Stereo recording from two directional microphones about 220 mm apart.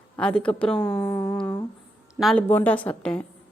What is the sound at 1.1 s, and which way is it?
Speech, 15° left (ahead or behind).